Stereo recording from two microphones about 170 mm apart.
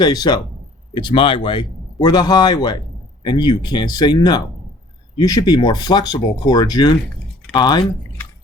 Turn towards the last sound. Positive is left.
turn(degrees=25)  # may be behind; listen again after turning